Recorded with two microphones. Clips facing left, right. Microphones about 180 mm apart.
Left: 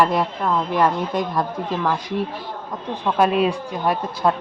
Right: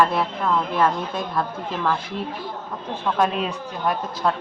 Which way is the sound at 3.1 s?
10° left (ahead or behind).